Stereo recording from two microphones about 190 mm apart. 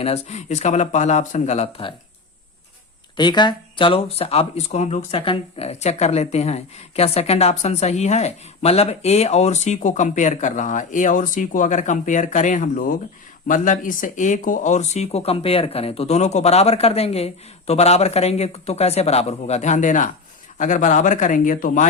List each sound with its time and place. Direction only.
0.0 s speech: 35° left (ahead or behind)
3.2 s speech: 25° left (ahead or behind); by 21.8 s 45° left (ahead or behind)